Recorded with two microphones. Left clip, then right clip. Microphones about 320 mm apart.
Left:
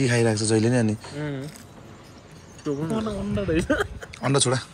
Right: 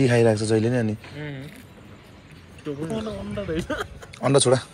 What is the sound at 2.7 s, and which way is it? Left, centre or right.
Speech, left.